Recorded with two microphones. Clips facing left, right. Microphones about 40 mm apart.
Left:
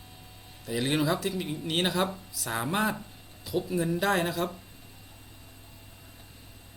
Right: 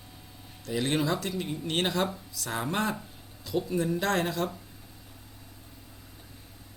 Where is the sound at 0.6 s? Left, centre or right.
Centre.